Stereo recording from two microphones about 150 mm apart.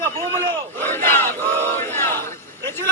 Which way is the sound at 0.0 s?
15° left (ahead or behind).